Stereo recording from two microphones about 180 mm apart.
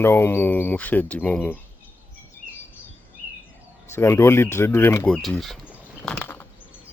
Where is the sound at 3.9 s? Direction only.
15° left (ahead or behind).